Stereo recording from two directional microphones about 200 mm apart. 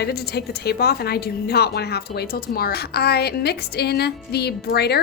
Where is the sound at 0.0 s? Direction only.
55° left (ahead or behind).